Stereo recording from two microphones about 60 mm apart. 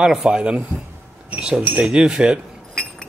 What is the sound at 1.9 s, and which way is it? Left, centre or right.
Speech, centre.